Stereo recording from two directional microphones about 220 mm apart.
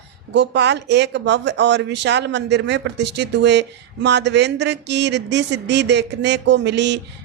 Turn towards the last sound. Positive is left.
turn(degrees=-50)  # may be behind; listen again after turning